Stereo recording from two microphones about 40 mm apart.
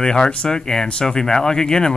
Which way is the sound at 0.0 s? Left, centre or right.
Left.